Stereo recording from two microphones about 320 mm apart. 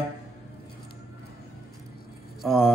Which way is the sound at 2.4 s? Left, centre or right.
Centre.